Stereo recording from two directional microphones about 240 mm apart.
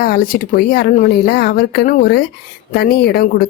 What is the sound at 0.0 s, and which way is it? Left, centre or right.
Speech, left.